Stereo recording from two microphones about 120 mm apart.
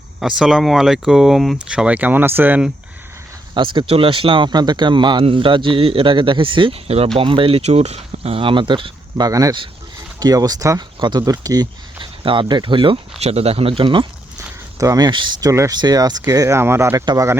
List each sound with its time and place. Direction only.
0.2 s speech: 5° right (ahead or behind)
3.5 s speech: 45° right (ahead or behind)
11.9 s speech: 45° right (ahead or behind)
13.1 s speech: 60° right (ahead or behind)
14.8 s speech: 30° right (ahead or behind)